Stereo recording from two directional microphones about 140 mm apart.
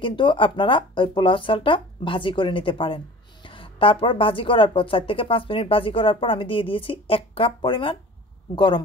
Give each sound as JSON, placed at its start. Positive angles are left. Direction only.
{"t": 0.0, "sound": "speech", "side_deg": 35}